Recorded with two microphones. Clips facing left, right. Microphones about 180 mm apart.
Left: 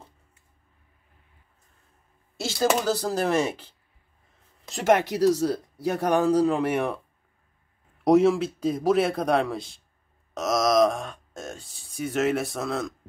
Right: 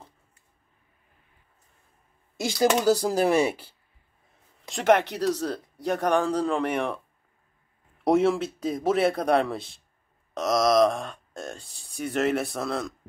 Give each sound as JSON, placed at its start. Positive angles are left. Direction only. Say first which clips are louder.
{"t": 2.3, "sound": "speech", "louder": "right 1 dB", "side_deg": -15}
{"t": 4.6, "sound": "speech", "louder": "even", "side_deg": 5}
{"t": 8.0, "sound": "speech", "louder": "left 3 dB", "side_deg": 0}